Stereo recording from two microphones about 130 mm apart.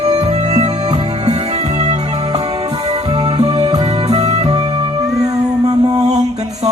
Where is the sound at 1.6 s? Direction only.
60° right (ahead or behind).